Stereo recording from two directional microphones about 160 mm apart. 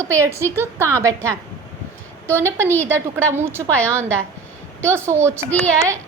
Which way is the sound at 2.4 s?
15° right (ahead or behind).